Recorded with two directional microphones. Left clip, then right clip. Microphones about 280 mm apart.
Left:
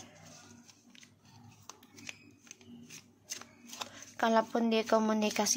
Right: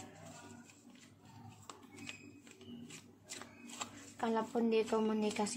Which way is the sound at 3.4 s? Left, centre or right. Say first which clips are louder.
Left 3 dB; left.